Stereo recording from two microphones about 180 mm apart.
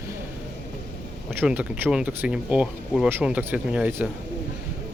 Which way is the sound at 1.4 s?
5° right (ahead or behind).